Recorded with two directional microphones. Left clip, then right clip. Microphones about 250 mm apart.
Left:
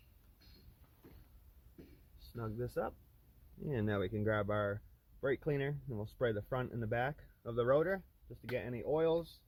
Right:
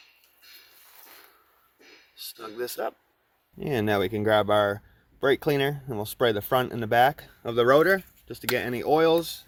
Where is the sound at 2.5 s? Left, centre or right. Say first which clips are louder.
Right 9 dB; right.